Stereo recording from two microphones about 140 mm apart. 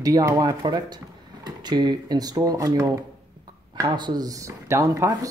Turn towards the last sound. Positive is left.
turn(degrees=-25)  # may be behind; listen again after turning